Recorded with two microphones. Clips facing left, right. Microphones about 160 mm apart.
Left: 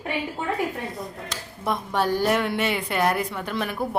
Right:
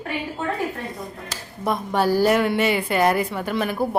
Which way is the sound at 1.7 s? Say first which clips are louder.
Right 3 dB; centre (ahead or behind).